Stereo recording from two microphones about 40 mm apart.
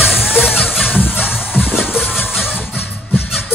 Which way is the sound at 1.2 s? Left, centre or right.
Centre.